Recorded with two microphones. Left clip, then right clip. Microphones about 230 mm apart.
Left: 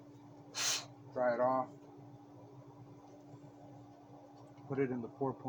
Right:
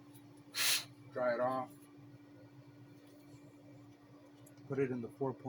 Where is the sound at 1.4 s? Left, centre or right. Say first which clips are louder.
Left 3 dB; right.